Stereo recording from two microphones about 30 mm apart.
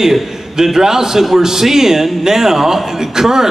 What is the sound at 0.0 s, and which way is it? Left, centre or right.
A man's voice, centre.